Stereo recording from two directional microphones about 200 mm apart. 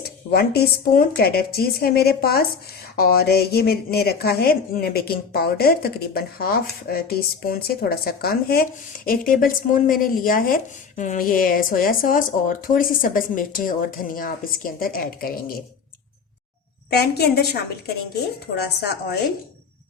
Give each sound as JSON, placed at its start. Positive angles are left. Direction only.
{"t": 0.3, "sound": "a woman's voice", "side_deg": 50}
{"t": 16.9, "sound": "a woman's voice", "side_deg": 55}
{"t": 18.5, "sound": "a woman's voice", "side_deg": 55}